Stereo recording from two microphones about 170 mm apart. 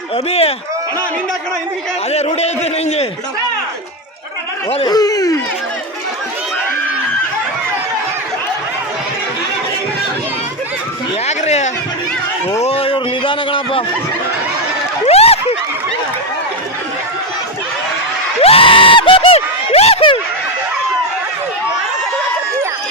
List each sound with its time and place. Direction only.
0.3 s speech: 35° left (ahead or behind)
2.1 s speech: 40° left (ahead or behind)
4.9 s speech: 20° left (ahead or behind)
11.3 s speech: 40° left (ahead or behind)
15.0 s a sound: 35° left (ahead or behind)
18.3 s a sound: 35° left (ahead or behind)